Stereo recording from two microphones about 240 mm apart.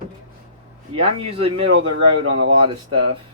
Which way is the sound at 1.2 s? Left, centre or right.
Right.